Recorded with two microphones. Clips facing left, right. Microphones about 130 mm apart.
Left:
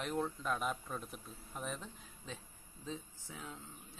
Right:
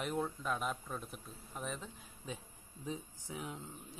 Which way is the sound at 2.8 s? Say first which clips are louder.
Right 3 dB; 15° right (ahead or behind).